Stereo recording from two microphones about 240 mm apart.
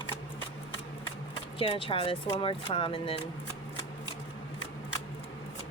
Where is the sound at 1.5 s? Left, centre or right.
Left.